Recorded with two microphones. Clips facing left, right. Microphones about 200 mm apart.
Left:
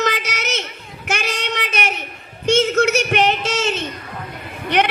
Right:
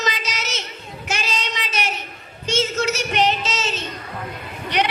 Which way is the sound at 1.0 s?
60° left (ahead or behind).